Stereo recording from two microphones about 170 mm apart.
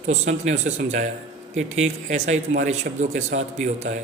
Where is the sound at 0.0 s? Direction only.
45° right (ahead or behind).